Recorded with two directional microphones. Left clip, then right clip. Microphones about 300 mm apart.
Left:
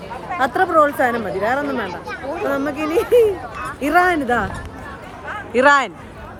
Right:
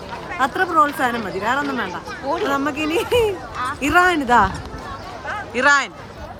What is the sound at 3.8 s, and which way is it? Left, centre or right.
Speech, centre.